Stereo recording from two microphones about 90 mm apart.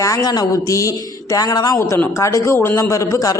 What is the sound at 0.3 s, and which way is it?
A woman's voice, 50° left (ahead or behind).